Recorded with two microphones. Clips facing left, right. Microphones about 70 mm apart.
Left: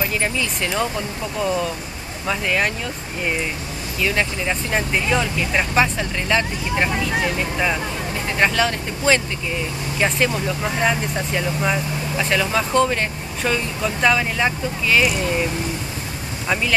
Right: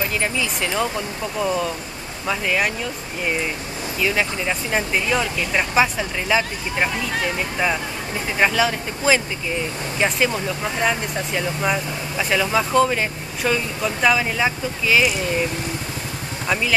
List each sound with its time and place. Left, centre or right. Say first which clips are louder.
0.2 s speech: even; centre
4.0 s speech: even; centre
8.4 s speech: even; centre